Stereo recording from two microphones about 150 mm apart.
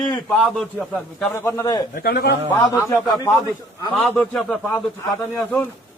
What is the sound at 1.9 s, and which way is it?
Speech, 90° left.